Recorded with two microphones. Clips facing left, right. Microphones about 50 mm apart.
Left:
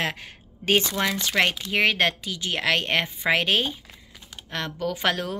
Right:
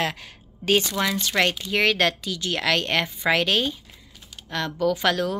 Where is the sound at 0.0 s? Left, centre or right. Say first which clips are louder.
Right 1 dB; left.